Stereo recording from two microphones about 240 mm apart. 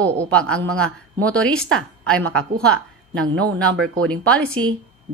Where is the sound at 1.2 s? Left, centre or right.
Centre.